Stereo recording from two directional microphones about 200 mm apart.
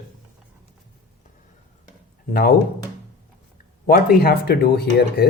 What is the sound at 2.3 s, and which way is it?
Speech, 50° left (ahead or behind).